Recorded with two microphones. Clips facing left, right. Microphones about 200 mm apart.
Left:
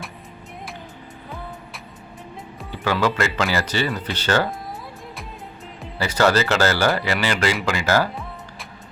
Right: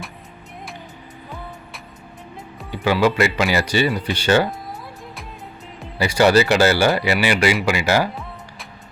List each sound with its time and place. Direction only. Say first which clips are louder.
2.7 s speech: right 4 dB; 15° right (ahead or behind)
6.0 s speech: right 4 dB; 15° right (ahead or behind)